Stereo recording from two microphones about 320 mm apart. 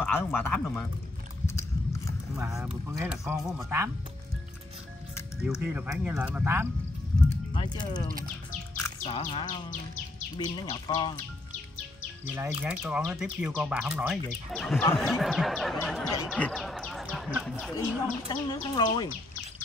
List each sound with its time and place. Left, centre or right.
0.0 s speech: centre
1.5 s biting: centre
2.3 s speech: centre
5.6 s speech: centre
7.5 s speech: centre
12.4 s speech: centre
18.3 s speech: centre